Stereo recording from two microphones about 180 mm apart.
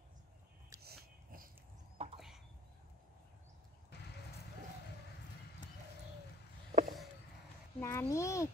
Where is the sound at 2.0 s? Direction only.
35° right (ahead or behind).